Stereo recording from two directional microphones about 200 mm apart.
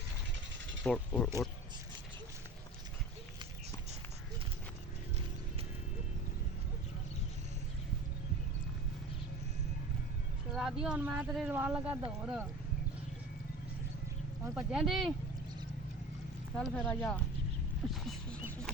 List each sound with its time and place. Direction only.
0.9 s speech: 5° left (ahead or behind)
10.5 s speech: 5° right (ahead or behind)
14.4 s speech: 5° right (ahead or behind)
16.6 s speech: 5° left (ahead or behind)